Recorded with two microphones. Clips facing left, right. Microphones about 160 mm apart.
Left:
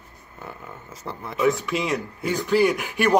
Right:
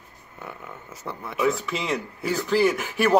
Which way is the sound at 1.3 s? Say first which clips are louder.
Left 3 dB; 5° right (ahead or behind).